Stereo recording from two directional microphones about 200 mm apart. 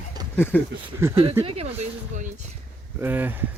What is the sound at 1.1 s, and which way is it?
Speech, 30° right (ahead or behind).